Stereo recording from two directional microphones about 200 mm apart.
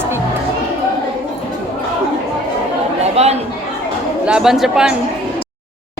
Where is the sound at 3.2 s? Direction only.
30° right (ahead or behind).